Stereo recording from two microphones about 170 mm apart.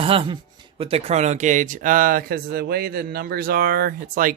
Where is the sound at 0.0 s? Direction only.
35° right (ahead or behind).